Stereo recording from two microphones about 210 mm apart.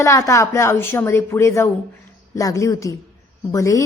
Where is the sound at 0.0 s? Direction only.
15° left (ahead or behind).